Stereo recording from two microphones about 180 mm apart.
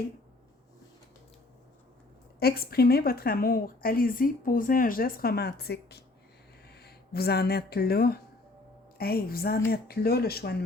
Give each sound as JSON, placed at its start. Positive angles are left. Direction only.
{"t": 2.4, "sound": "a woman's voice", "side_deg": 60}